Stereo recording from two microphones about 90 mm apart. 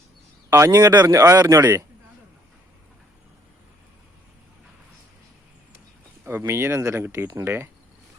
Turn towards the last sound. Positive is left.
turn(degrees=-30)  # may be behind; listen again after turning